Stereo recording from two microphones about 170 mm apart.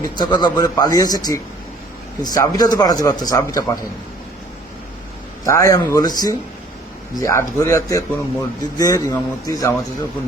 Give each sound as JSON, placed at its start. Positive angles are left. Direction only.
{"t": 0.0, "sound": "a man's voice", "side_deg": 25}
{"t": 5.5, "sound": "a man's voice", "side_deg": 20}